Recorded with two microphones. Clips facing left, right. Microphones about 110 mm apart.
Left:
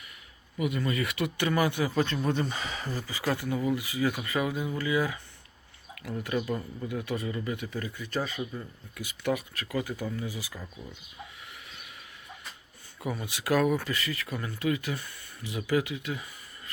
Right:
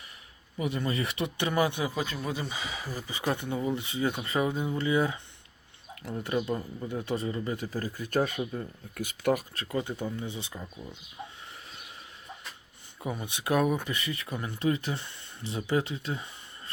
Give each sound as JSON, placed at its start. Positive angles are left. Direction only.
{"t": 0.6, "sound": "speech", "side_deg": -30}
{"t": 2.0, "sound": "speech", "side_deg": -5}
{"t": 9.6, "sound": "speech", "side_deg": -25}
{"t": 13.1, "sound": "speech", "side_deg": -20}